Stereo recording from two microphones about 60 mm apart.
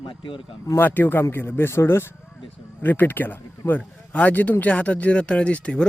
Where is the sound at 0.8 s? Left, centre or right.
Left.